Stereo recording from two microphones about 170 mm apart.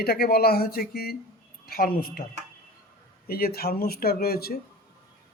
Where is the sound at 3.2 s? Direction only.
60° left (ahead or behind).